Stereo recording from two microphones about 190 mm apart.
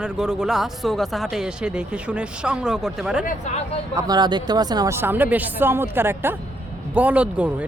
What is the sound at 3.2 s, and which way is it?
Speech, 45° left (ahead or behind).